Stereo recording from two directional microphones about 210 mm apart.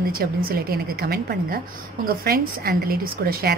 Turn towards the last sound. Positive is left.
turn(degrees=-50)  # may be behind; listen again after turning